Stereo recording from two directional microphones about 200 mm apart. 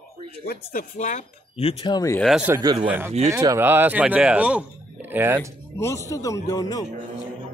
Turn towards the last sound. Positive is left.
turn(degrees=15)  # may be behind; listen again after turning